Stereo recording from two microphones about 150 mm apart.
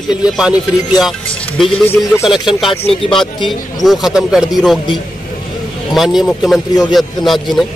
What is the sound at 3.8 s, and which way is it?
Speech, centre (ahead or behind).